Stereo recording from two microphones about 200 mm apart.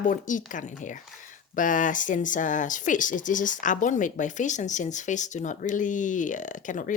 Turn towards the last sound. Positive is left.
turn(degrees=40)  # may be behind; listen again after turning